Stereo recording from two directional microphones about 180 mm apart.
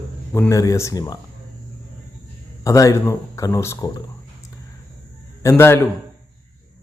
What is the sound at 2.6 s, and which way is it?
Speech, 20° left (ahead or behind).